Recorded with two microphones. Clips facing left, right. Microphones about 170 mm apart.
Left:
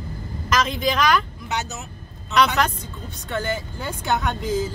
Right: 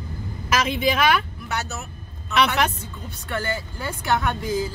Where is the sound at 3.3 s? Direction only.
20° left (ahead or behind).